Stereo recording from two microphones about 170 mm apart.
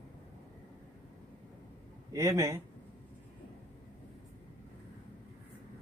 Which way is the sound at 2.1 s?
15° right (ahead or behind).